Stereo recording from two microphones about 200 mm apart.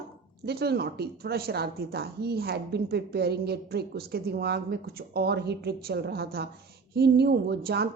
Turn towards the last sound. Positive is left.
turn(degrees=-55)  # may be behind; listen again after turning